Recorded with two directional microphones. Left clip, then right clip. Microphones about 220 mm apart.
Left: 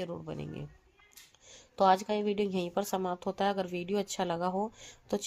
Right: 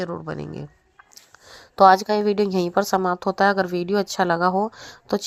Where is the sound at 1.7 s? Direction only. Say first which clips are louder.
Right 12 dB; 30° right (ahead or behind).